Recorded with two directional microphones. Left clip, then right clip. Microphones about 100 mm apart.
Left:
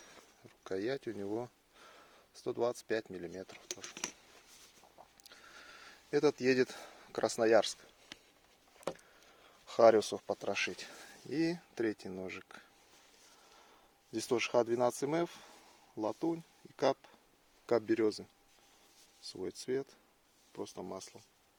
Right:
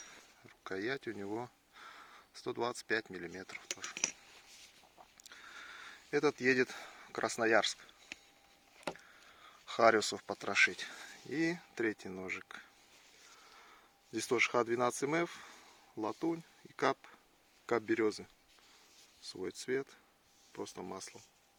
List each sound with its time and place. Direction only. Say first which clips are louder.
0.6 s speech: left 1 dB; 45° left (ahead or behind)
1.4 s a sound: left 1 dB; 35° left (ahead or behind)
3.3 s speech: even; 30° left (ahead or behind)
5.2 s a sound: right 5 dB; 35° left (ahead or behind); by 7.9 s 55° left (ahead or behind)
9.2 s a sound: right 4 dB; 45° left (ahead or behind)
10.3 s speech: right 9 dB; 30° left (ahead or behind); by 12.6 s 45° left (ahead or behind)
14.1 s speech: right 1 dB; 40° left (ahead or behind)
17.7 s speech: left 2 dB; 55° left (ahead or behind)
19.2 s speech: even; 30° left (ahead or behind)